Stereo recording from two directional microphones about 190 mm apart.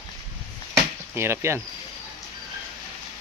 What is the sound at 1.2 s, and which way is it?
Speech, 15° right (ahead or behind).